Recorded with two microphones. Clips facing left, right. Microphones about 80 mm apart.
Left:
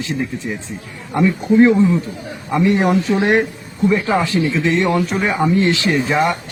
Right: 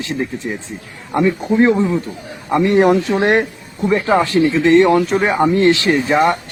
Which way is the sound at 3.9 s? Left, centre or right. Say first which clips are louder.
Right 4 dB; right.